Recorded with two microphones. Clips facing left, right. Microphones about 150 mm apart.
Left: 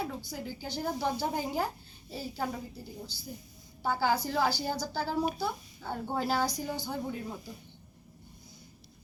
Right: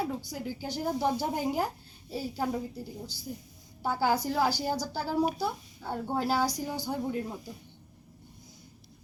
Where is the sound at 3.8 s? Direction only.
10° right (ahead or behind).